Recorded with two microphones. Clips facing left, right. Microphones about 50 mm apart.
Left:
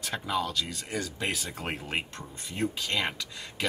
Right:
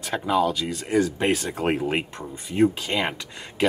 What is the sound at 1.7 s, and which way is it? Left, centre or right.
Speech, centre.